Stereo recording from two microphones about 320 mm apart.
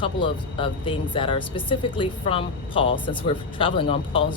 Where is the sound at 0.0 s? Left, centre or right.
Centre.